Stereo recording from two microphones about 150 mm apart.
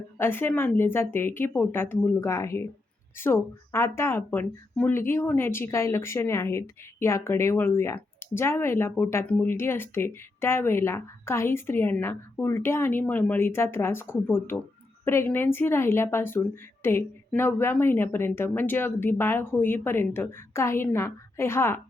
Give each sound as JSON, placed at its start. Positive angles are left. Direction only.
{"t": 0.2, "sound": "speech", "side_deg": 15}